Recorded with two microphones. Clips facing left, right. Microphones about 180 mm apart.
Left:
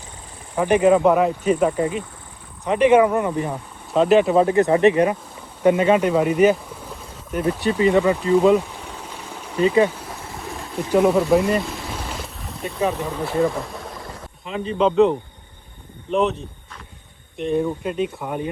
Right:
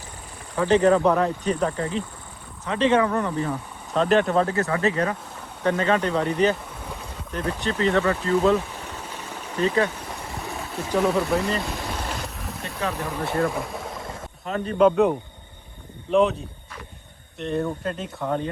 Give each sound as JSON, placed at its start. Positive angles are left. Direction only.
{"t": 0.5, "sound": "speech", "side_deg": 15}
{"t": 0.8, "sound": "speech", "side_deg": 5}
{"t": 3.9, "sound": "speech", "side_deg": 5}
{"t": 4.4, "sound": "speech", "side_deg": 20}
{"t": 8.3, "sound": "stream", "side_deg": 15}
{"t": 10.9, "sound": "speech", "side_deg": 0}
{"t": 11.6, "sound": "boat", "side_deg": 0}
{"t": 13.1, "sound": "a sound", "side_deg": 0}
{"t": 14.8, "sound": "speech", "side_deg": -5}